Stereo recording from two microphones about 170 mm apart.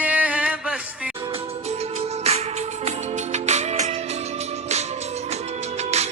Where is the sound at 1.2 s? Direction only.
35° right (ahead or behind).